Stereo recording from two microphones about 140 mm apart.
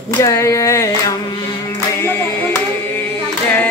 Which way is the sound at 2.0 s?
15° left (ahead or behind).